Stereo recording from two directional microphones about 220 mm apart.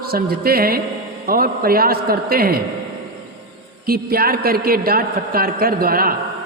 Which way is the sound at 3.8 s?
45° right (ahead or behind).